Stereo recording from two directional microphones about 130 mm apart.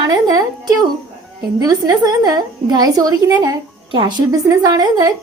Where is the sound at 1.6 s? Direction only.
30° right (ahead or behind).